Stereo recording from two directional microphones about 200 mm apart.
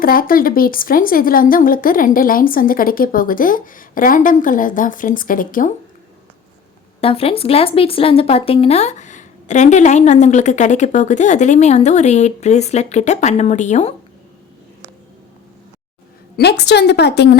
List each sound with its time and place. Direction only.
0.0 s speech: 45° left (ahead or behind)
7.0 s speech: 30° left (ahead or behind)
16.4 s a woman's voice: 55° left (ahead or behind)